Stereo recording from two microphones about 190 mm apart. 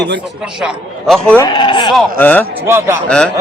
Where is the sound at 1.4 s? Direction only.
25° left (ahead or behind).